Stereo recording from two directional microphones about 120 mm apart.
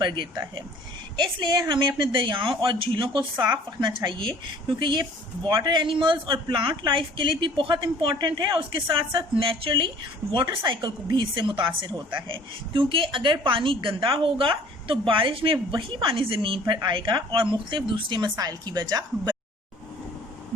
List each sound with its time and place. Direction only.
0.0 s a woman's voice: 40° right (ahead or behind)
10.4 s a woman's voice: 25° right (ahead or behind)
10.7 s a woman's voice: 40° right (ahead or behind)